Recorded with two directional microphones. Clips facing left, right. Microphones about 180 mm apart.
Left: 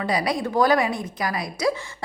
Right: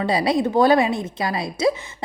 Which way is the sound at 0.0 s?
25° right (ahead or behind).